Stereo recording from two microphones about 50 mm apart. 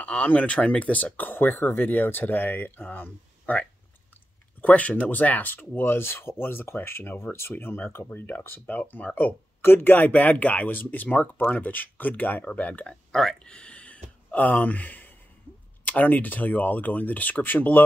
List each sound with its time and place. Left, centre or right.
0.0 s speech: left
5.8 s speech: left
8.5 s speech: left
9.6 s speech: left
13.1 s a sound: centre; by 15.1 s left
15.8 s speech: left